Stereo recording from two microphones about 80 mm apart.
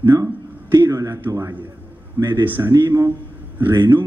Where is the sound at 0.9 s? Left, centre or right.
Right.